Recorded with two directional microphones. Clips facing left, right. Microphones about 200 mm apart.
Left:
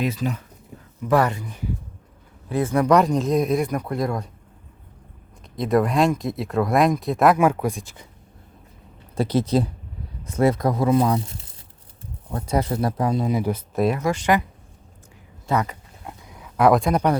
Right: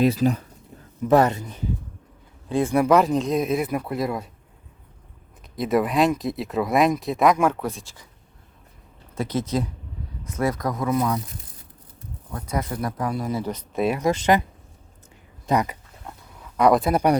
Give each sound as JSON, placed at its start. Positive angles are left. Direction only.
{"t": 0.0, "sound": "speech", "side_deg": -35}
{"t": 1.0, "sound": "speech", "side_deg": -25}
{"t": 2.6, "sound": "speech", "side_deg": -10}
{"t": 5.5, "sound": "speech", "side_deg": 0}
{"t": 9.1, "sound": "speech", "side_deg": 30}
{"t": 12.3, "sound": "speech", "side_deg": 30}
{"t": 14.0, "sound": "speech", "side_deg": -20}
{"t": 15.4, "sound": "speech", "side_deg": -15}
{"t": 16.0, "sound": "a sound", "side_deg": 10}